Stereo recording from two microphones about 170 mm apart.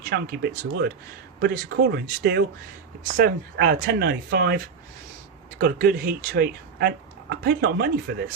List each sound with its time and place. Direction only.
0.1 s speech: 70° right (ahead or behind)
3.1 s speech: 55° right (ahead or behind)